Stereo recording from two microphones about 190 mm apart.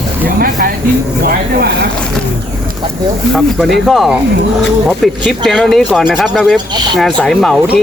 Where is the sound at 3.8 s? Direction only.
Centre (ahead or behind).